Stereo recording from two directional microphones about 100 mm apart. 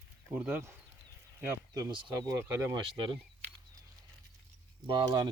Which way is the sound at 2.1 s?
35° right (ahead or behind).